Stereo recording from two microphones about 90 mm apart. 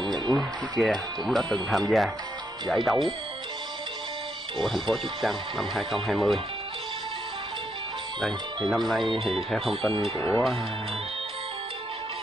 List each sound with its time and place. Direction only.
0.0 s a sound: 55° right (ahead or behind)
0.3 s speech: centre (ahead or behind)
4.6 s speech: centre (ahead or behind)
8.6 s speech: centre (ahead or behind)